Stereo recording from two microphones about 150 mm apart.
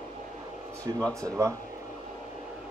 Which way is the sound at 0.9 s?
25° right (ahead or behind).